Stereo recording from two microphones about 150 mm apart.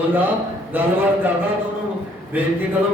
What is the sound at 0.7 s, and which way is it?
Speech, 10° right (ahead or behind).